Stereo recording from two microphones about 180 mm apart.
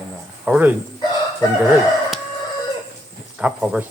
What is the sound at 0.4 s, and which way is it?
Speech, 5° right (ahead or behind).